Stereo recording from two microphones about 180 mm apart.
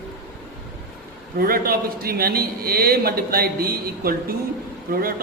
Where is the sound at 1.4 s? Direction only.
55° right (ahead or behind).